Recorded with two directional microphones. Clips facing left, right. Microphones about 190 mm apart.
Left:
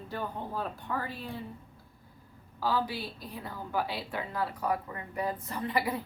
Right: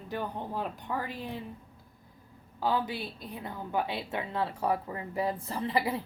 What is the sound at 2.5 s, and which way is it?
A woman's voice, 20° right (ahead or behind).